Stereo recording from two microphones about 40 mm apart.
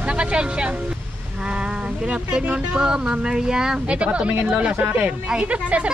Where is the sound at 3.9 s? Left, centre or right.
Right.